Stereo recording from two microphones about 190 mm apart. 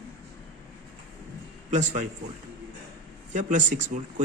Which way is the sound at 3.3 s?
40° right (ahead or behind).